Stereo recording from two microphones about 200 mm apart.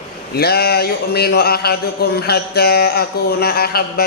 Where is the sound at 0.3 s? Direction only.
50° left (ahead or behind).